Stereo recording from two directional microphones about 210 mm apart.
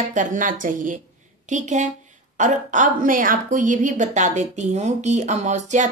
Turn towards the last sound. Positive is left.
turn(degrees=-35)  # may be behind; listen again after turning